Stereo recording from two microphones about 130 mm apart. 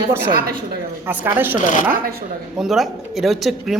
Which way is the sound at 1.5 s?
75° left (ahead or behind).